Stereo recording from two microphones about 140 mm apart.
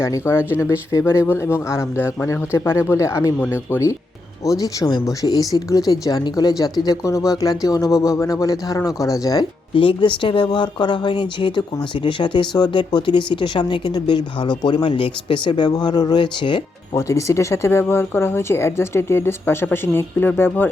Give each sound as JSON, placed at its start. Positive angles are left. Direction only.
{"t": 0.0, "sound": "speech", "side_deg": 20}
{"t": 9.7, "sound": "speech", "side_deg": 35}
{"t": 16.9, "sound": "speech", "side_deg": 20}